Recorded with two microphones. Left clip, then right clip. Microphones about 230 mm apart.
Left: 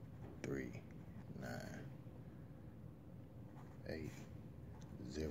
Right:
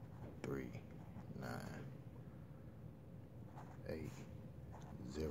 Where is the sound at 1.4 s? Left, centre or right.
Centre.